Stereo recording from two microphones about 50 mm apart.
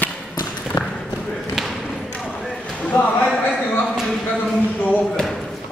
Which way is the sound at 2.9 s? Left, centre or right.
Left.